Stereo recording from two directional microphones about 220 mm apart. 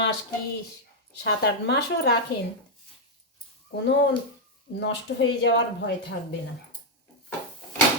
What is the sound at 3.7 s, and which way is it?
Speech, 55° left (ahead or behind).